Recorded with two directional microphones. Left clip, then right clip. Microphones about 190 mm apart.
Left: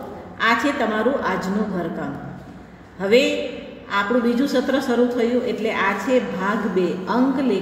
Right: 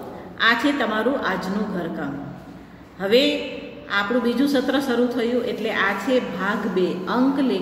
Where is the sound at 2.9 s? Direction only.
35° left (ahead or behind).